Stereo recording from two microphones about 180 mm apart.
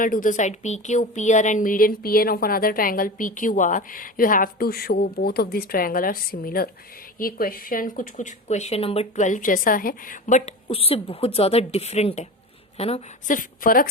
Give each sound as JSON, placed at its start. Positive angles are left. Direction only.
{"t": 0.0, "sound": "a woman's voice", "side_deg": 50}